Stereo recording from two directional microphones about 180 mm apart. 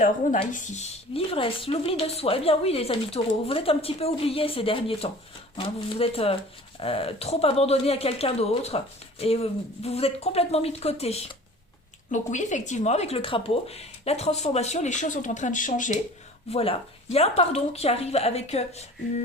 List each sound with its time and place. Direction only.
0.0 s speech: 45° left (ahead or behind)
16.5 s speech: 35° left (ahead or behind)